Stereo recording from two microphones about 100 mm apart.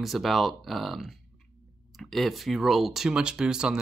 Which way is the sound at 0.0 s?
Centre (ahead or behind).